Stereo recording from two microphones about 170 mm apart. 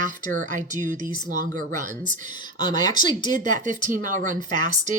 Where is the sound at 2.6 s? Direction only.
25° left (ahead or behind).